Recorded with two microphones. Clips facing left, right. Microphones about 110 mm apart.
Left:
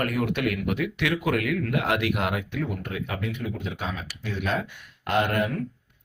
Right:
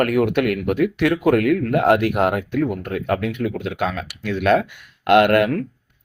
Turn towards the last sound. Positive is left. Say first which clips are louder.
# right 10 dB
turn(degrees=-80)